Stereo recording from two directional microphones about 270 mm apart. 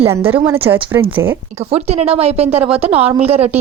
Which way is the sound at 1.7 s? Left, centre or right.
Right.